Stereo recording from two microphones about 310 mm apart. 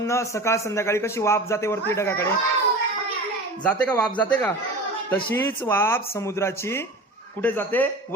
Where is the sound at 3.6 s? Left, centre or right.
Centre.